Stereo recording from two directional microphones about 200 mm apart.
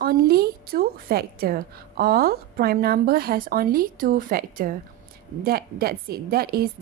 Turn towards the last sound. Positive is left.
turn(degrees=-50)  # may be behind; listen again after turning